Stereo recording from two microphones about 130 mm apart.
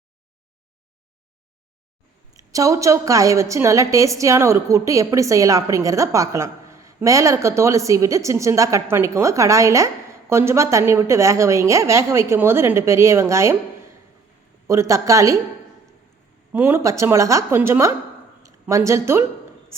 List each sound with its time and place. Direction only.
2.3 s a woman's voice: 25° right (ahead or behind)
16.5 s a woman's voice: 15° right (ahead or behind)